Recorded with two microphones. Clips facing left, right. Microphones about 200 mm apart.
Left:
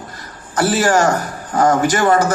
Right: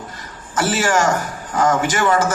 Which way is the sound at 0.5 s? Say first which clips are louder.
Left 3 dB; 40° left (ahead or behind).